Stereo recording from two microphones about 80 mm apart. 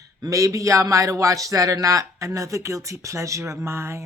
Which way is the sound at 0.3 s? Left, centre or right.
Right.